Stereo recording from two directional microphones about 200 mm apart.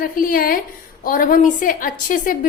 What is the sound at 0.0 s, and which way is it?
A woman's voice, 45° left (ahead or behind).